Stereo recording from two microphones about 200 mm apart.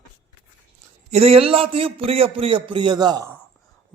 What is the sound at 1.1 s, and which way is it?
A man's voice, 30° right (ahead or behind).